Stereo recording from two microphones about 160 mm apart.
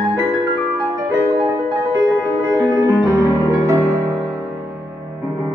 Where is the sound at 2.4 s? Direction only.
15° right (ahead or behind).